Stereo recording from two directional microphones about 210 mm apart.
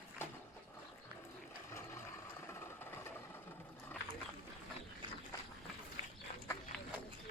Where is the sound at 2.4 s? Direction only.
10° left (ahead or behind).